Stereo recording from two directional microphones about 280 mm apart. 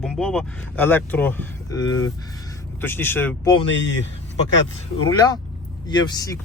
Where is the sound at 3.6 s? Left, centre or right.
Left.